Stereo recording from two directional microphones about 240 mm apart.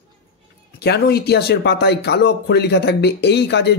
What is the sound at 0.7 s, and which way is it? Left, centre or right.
A man's voice, left.